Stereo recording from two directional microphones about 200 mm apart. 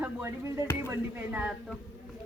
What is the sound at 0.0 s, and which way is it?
Speech, 10° right (ahead or behind).